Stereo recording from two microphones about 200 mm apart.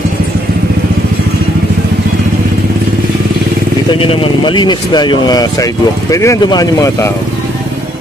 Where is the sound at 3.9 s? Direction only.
25° left (ahead or behind).